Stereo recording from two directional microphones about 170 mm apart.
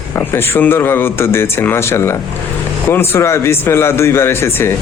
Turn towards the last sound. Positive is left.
turn(degrees=15)  # may be behind; listen again after turning